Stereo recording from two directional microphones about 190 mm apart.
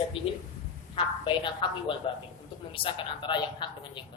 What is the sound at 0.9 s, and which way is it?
A man's voice, 25° left (ahead or behind).